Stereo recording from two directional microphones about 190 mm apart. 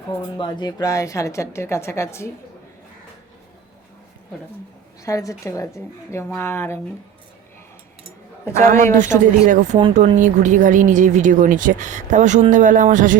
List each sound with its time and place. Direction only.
0.3 s a woman's voice: 25° left (ahead or behind)
5.0 s a woman's voice: 15° left (ahead or behind)
8.6 s speech: 40° right (ahead or behind)
9.7 s speech: 25° right (ahead or behind)
10.0 s speech: 40° right (ahead or behind)